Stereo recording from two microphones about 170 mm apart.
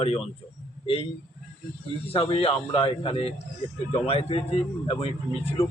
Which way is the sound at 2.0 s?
35° left (ahead or behind).